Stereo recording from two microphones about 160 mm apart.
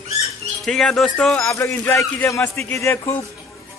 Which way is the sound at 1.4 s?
15° left (ahead or behind).